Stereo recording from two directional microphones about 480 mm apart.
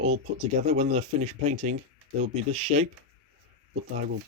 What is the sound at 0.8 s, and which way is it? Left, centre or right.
Speech, centre.